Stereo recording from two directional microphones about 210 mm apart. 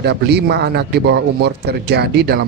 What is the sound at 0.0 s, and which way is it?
A man's voice, 50° right (ahead or behind).